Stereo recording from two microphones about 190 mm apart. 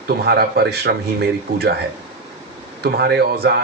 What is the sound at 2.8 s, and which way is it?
Speech, 60° right (ahead or behind).